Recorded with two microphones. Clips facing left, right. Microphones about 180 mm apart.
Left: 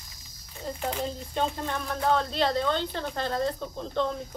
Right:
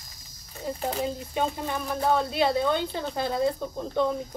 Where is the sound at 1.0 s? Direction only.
5° right (ahead or behind).